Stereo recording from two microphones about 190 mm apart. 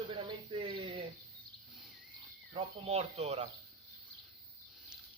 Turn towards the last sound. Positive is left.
turn(degrees=-35)  # may be behind; listen again after turning